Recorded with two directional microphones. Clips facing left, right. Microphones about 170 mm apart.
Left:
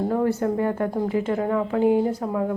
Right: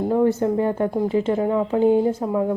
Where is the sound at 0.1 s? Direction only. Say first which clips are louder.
Right 3 dB; 15° right (ahead or behind).